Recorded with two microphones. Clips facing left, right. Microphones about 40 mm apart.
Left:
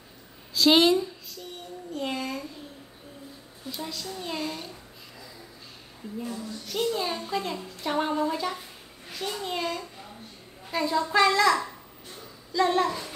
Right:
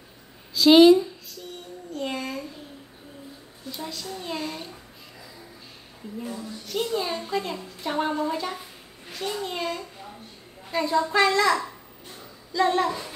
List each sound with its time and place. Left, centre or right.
0.6 s a woman's voice: centre
1.9 s a sound: centre
3.7 s a woman's voice: centre
6.1 s a woman's voice: centre